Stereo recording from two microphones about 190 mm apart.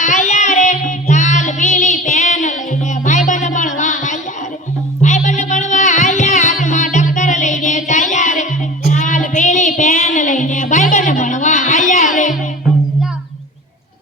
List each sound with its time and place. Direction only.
0.0 s music: 40° left (ahead or behind)
8.9 s child singing: 40° left (ahead or behind)